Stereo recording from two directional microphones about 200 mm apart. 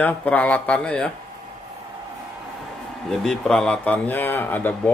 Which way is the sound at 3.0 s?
5° left (ahead or behind).